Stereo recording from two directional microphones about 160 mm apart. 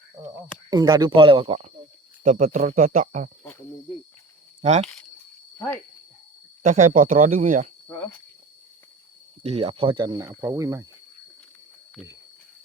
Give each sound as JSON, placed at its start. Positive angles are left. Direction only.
{"t": 0.7, "sound": "speech", "side_deg": -25}
{"t": 4.6, "sound": "speech", "side_deg": -45}
{"t": 6.6, "sound": "speech", "side_deg": -50}
{"t": 9.4, "sound": "speech", "side_deg": -40}